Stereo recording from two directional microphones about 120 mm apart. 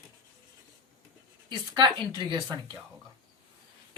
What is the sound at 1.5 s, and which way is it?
Speech, 40° right (ahead or behind).